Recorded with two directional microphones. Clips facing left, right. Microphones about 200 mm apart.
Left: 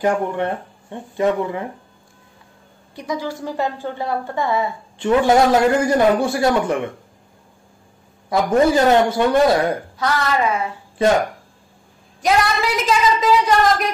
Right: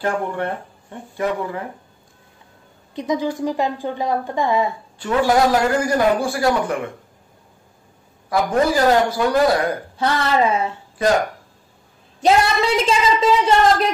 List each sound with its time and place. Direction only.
0.0 s a man's voice: 15° left (ahead or behind)
2.9 s a woman's voice: 20° right (ahead or behind)
5.2 s a man's voice: 20° left (ahead or behind)
8.6 s a man's voice: 25° left (ahead or behind)
9.9 s a woman's voice: 30° right (ahead or behind)
12.2 s a woman's voice: 30° right (ahead or behind)